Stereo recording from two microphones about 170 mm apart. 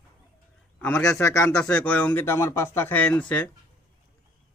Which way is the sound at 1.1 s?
15° left (ahead or behind).